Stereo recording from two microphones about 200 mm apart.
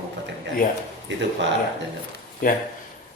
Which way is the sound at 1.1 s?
65° right (ahead or behind).